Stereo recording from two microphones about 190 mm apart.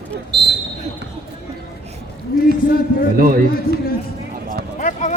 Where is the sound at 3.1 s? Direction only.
50° right (ahead or behind).